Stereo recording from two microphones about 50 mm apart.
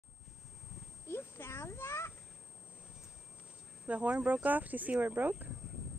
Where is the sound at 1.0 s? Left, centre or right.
Left.